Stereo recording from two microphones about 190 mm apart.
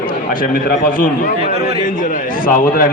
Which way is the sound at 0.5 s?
45° left (ahead or behind).